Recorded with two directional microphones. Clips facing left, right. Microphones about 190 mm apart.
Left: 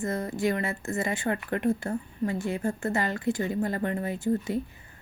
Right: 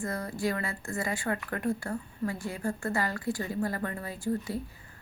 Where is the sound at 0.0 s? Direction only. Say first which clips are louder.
Left 4 dB; 20° left (ahead or behind).